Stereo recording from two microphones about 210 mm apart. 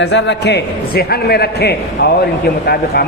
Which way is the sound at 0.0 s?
60° left (ahead or behind).